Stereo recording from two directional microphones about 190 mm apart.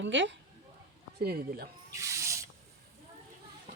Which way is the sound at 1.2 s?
55° right (ahead or behind).